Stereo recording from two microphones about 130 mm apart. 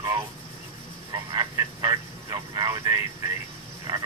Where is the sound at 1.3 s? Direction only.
30° right (ahead or behind).